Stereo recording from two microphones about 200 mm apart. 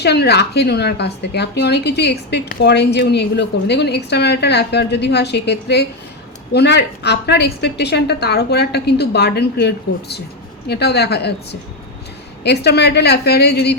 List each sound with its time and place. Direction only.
0.0 s a woman's voice: 55° left (ahead or behind)
12.4 s a woman's voice: 55° left (ahead or behind)